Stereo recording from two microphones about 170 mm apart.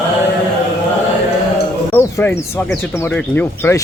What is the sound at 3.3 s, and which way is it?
Speech, 15° left (ahead or behind).